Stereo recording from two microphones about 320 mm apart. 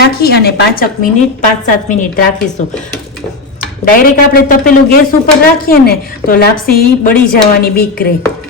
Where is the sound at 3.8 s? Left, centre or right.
Left.